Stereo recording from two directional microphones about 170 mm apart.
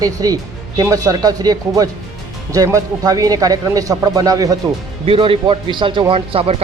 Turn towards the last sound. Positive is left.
turn(degrees=-35)  # may be behind; listen again after turning